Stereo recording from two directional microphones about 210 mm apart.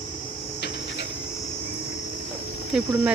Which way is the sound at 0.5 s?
55° left (ahead or behind).